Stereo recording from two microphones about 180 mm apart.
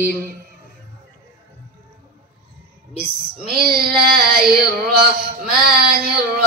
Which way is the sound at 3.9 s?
55° right (ahead or behind).